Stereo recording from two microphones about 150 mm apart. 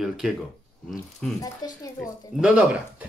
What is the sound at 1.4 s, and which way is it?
Speech, 25° left (ahead or behind).